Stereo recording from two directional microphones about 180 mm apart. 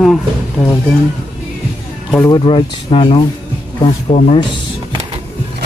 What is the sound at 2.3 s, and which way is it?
Speech, 30° left (ahead or behind).